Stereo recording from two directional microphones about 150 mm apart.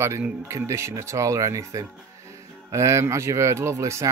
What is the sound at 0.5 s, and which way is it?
Speech, 20° right (ahead or behind).